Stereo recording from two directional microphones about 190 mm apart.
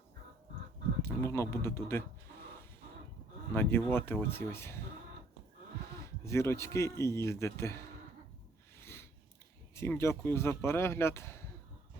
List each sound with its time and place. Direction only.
1.0 s speech: 15° left (ahead or behind)
3.5 s speech: 10° left (ahead or behind)
5.9 s speech: 15° left (ahead or behind)
8.8 s a sound: 15° left (ahead or behind)
9.7 s speech: 15° left (ahead or behind)